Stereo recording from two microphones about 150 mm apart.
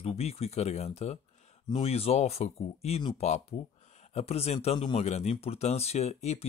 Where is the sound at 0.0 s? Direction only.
45° left (ahead or behind).